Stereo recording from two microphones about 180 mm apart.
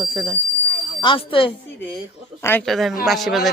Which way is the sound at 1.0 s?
30° left (ahead or behind).